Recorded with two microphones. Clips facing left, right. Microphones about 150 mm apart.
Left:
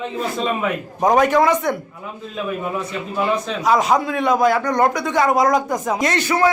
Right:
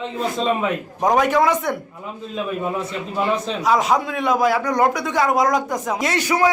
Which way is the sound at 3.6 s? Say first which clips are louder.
Left 2 dB; centre (ahead or behind).